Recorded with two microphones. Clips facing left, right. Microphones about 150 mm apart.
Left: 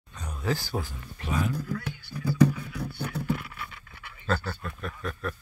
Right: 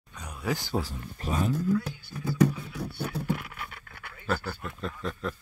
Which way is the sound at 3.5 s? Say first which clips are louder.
Even; 45° right (ahead or behind).